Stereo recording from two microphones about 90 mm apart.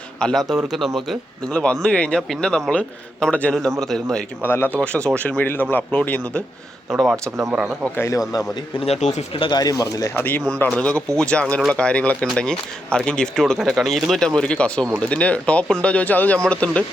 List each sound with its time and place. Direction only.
0.2 s a man's voice: 5° left (ahead or behind)
1.8 s a man's voice: 10° left (ahead or behind)
4.4 s speech: 25° left (ahead or behind)
4.8 s speech: 10° left (ahead or behind)
6.9 s a man's voice: centre (ahead or behind)
7.9 s speech: 30° left (ahead or behind)
9.3 s speech: 70° left (ahead or behind)
9.6 s speech: 45° left (ahead or behind)
10.2 s speech: 20° left (ahead or behind)